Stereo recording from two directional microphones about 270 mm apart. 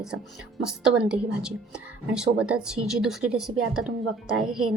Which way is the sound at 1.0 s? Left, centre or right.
Centre.